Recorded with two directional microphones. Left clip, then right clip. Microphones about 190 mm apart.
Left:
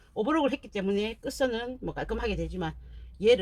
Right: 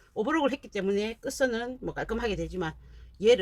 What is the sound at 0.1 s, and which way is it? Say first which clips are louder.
Speech: even; 15° right (ahead or behind).